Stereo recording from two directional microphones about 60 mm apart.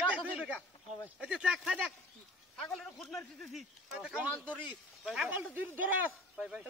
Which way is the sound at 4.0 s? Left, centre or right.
Right.